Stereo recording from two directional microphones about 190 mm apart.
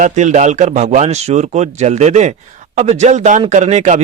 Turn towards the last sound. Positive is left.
turn(degrees=-35)  # may be behind; listen again after turning